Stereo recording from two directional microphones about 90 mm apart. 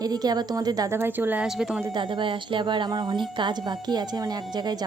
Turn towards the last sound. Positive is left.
turn(degrees=-50)  # may be behind; listen again after turning